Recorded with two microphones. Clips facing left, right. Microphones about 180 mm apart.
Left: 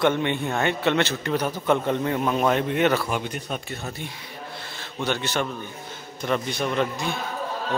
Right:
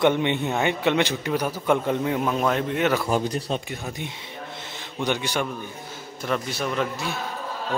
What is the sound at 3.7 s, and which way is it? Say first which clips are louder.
A man's voice: right 1 dB; 10° right (ahead or behind).